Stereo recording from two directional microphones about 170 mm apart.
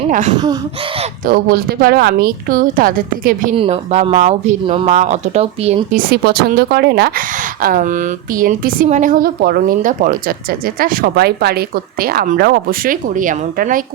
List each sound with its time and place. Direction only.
0.1 s speech: 45° right (ahead or behind)
1.2 s speech: 60° right (ahead or behind)
3.5 s speech: 35° right (ahead or behind)
5.9 s speech: 65° right (ahead or behind)
7.6 s speech: 50° right (ahead or behind)